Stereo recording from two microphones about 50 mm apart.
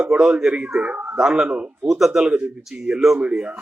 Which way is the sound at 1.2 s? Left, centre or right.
Centre.